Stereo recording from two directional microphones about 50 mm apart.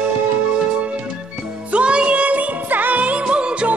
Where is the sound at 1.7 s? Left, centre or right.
Right.